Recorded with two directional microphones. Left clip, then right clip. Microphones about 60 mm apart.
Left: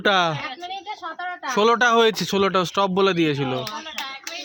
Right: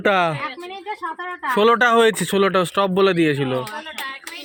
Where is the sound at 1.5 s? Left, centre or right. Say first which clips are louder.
Right 2 dB; right.